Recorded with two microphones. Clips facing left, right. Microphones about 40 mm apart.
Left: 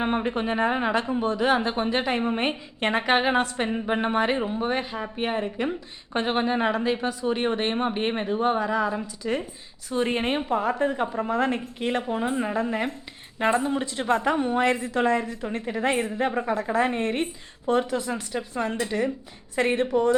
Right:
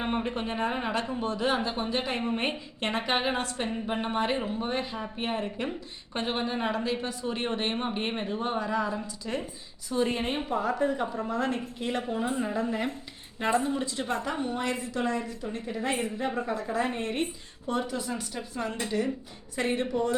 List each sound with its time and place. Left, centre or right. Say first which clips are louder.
0.0 s a woman's voice: left 5 dB; left
1.6 s a woman's voice: left 5 dB; left; by 5.7 s centre
6.1 s a woman's voice: left 6 dB; left
8.9 s a woman's voice: left 5 dB; left